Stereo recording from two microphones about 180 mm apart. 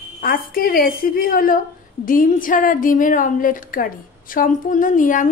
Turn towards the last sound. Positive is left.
turn(degrees=45)  # may be behind; listen again after turning